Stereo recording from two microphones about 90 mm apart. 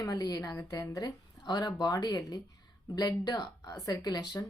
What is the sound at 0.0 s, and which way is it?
Speech, 45° left (ahead or behind).